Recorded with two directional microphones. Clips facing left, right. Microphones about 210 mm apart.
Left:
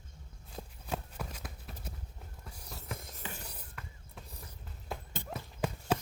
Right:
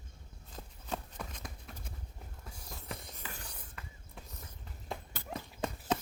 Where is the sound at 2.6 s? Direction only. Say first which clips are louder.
Left 1 dB; centre (ahead or behind).